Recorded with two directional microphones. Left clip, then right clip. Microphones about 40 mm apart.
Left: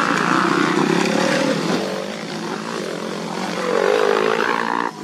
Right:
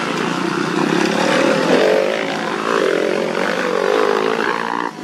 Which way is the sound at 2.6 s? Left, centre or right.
Right.